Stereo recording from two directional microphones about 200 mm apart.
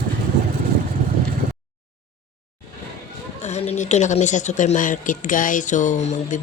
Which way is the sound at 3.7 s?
35° left (ahead or behind).